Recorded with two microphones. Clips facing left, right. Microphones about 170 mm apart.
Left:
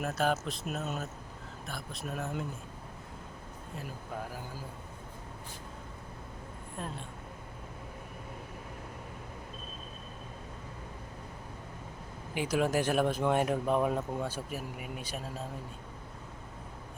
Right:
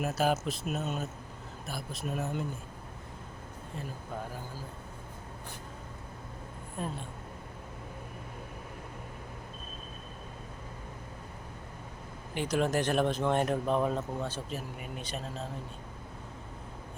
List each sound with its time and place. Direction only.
0.0 s speech: 5° right (ahead or behind)
6.7 s speech: 5° right (ahead or behind)
12.3 s speech: 10° left (ahead or behind)